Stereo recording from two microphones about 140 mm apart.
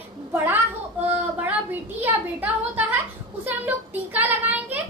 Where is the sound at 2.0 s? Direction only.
10° right (ahead or behind).